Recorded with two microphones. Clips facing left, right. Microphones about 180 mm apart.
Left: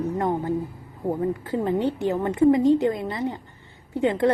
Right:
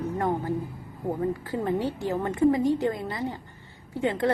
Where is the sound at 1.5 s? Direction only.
20° left (ahead or behind).